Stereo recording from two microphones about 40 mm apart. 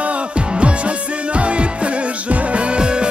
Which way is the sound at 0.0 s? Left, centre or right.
Right.